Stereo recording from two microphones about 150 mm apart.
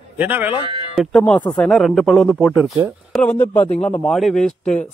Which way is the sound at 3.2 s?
10° left (ahead or behind).